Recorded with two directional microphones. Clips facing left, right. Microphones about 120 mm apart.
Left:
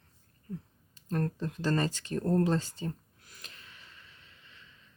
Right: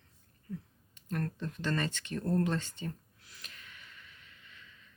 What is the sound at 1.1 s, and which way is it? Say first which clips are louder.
Speech: left 4 dB; 35° left (ahead or behind).